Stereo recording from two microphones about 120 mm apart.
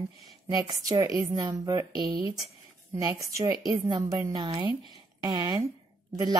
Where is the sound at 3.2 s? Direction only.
25° right (ahead or behind).